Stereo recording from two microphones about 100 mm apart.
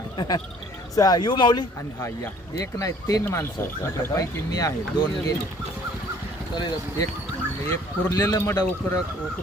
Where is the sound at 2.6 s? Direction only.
35° left (ahead or behind).